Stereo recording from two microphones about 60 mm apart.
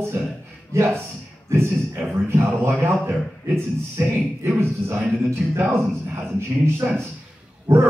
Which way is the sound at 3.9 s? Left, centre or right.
Right.